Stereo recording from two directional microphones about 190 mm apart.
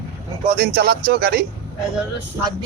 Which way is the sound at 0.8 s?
55° right (ahead or behind).